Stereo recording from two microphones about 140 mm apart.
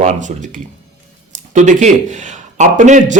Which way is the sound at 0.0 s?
60° right (ahead or behind).